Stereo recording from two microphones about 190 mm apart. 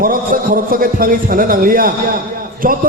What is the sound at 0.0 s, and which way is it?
A man's voice, 50° right (ahead or behind).